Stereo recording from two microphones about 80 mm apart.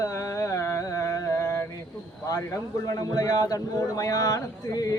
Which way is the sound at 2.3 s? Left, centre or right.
Left.